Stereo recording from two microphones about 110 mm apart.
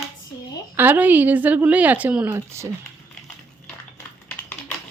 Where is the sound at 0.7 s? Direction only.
15° right (ahead or behind).